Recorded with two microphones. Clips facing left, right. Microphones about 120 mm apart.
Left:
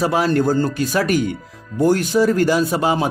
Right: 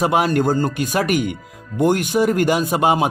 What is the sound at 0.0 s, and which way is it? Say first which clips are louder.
Speech: even; 15° right (ahead or behind).